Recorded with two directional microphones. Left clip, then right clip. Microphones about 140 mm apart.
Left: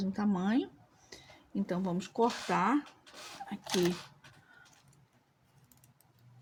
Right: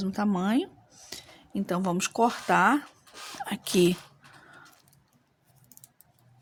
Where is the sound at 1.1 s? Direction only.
75° right (ahead or behind).